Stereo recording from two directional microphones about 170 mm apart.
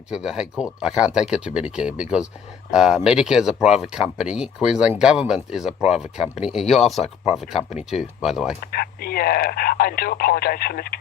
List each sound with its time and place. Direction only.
0.1 s speech: 5° right (ahead or behind)
8.6 s speech: 65° left (ahead or behind)